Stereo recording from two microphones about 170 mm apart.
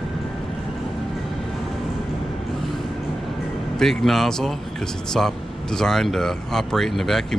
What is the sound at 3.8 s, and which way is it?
Speech, centre (ahead or behind).